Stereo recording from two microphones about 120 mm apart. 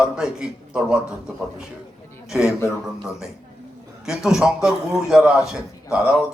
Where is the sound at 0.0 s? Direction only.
5° right (ahead or behind).